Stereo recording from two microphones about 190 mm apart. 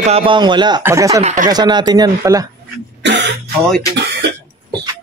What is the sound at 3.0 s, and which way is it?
Speech, 65° right (ahead or behind).